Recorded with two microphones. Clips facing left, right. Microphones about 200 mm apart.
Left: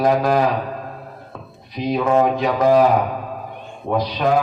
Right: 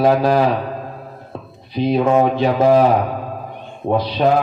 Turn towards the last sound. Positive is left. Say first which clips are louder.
# right 3 dB
turn(degrees=-30)  # may be behind; listen again after turning